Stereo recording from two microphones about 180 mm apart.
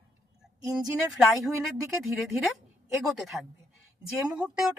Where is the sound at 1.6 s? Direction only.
Centre (ahead or behind).